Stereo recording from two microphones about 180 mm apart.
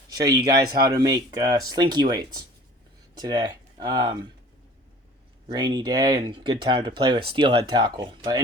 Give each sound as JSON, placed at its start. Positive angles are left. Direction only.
{"t": 0.1, "sound": "a sound", "side_deg": -20}
{"t": 0.4, "sound": "speech", "side_deg": -20}
{"t": 5.5, "sound": "speech", "side_deg": -25}